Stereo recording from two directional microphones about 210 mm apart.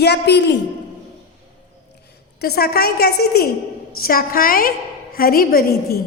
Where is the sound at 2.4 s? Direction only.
50° left (ahead or behind).